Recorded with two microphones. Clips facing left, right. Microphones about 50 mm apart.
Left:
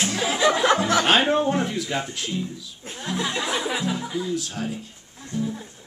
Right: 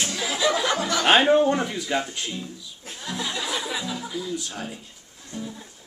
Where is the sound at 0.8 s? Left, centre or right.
Centre.